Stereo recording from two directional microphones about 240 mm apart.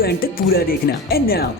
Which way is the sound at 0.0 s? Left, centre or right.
Left.